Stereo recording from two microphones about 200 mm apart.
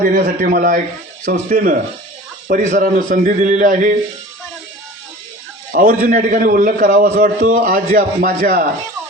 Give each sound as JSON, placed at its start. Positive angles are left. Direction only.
{"t": 0.0, "sound": "a man's voice", "side_deg": -45}
{"t": 5.7, "sound": "a man's voice", "side_deg": -45}